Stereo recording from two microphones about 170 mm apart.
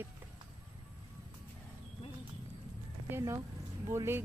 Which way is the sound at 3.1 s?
15° right (ahead or behind).